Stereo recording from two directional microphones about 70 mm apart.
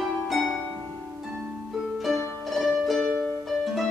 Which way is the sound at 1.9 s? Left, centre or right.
Centre.